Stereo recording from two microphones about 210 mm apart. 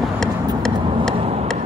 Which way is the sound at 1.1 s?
30° right (ahead or behind).